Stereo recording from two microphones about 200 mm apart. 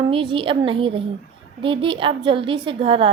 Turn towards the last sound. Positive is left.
turn(degrees=-30)  # may be behind; listen again after turning